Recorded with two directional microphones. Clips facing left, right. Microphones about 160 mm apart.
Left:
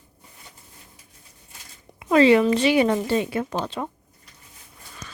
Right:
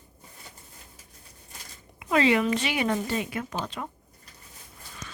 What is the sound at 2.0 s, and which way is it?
Speech, 35° left (ahead or behind).